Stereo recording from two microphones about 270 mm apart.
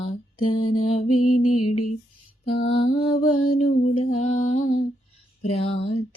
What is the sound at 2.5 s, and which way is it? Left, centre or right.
Mantra, left.